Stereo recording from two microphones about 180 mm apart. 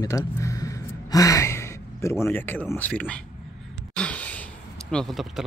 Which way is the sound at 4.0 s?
5° left (ahead or behind).